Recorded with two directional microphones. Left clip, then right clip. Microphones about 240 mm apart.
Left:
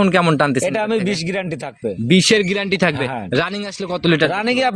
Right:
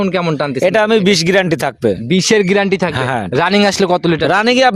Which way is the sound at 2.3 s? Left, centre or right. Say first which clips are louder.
Right 7 dB; right.